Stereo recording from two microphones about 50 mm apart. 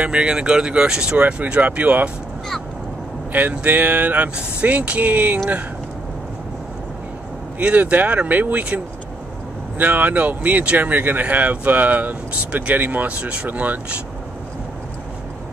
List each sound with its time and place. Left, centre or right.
0.0 s speech: right
1.1 s speech: right
3.3 s speech: right
7.5 s speech: right
9.8 s speech: right